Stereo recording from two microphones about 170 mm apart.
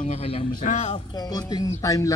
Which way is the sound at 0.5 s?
45° left (ahead or behind).